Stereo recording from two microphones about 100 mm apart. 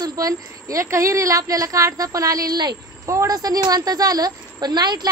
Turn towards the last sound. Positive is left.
turn(degrees=-45)  # may be behind; listen again after turning